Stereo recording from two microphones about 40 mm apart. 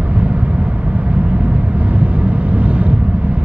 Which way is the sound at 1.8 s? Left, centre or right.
Right.